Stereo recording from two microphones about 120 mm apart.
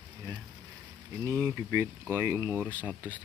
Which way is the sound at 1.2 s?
25° right (ahead or behind).